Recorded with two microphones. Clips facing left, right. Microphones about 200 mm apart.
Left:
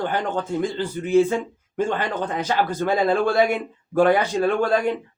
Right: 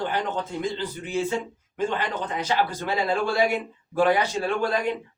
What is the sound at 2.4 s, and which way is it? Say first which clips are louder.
Speech: left 3 dB; 50° left (ahead or behind).